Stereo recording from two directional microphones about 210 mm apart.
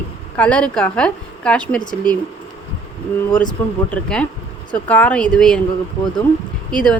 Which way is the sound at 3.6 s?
10° left (ahead or behind).